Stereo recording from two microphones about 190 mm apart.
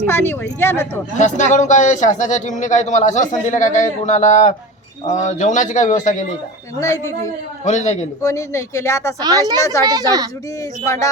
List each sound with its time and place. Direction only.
0.1 s speech: 10° left (ahead or behind)
1.2 s a man's voice: 40° left (ahead or behind)
6.7 s speech: 15° left (ahead or behind)
7.6 s a man's voice: 40° left (ahead or behind)
8.2 s speech: 15° left (ahead or behind)
9.2 s a woman's voice: 20° right (ahead or behind)
9.6 s speech: 15° left (ahead or behind)
9.8 s a woman's voice: 20° right (ahead or behind)